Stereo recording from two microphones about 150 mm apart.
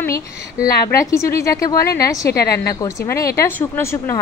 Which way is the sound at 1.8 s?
90° left.